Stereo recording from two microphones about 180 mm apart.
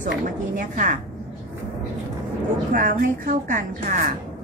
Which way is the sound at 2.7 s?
50° right (ahead or behind).